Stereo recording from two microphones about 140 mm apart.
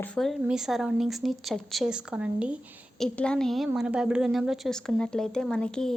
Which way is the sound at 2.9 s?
5° left (ahead or behind).